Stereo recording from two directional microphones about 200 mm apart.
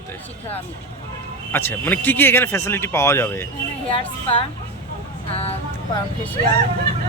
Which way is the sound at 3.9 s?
25° left (ahead or behind).